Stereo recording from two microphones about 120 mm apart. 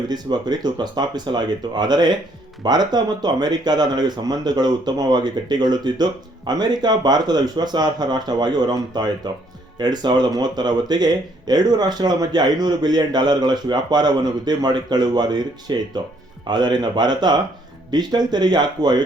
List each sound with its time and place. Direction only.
0.1 s speech: 35° right (ahead or behind)